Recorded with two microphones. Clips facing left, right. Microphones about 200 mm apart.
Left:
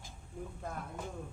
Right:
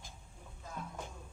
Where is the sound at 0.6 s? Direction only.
60° left (ahead or behind).